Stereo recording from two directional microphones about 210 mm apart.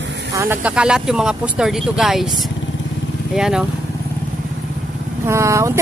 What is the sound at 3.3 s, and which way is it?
Speech, 5° right (ahead or behind).